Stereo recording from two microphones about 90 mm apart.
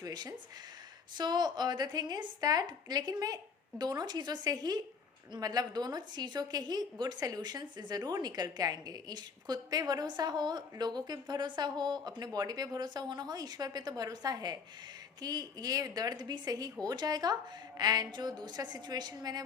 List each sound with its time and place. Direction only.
0.0 s a woman's voice: 45° right (ahead or behind)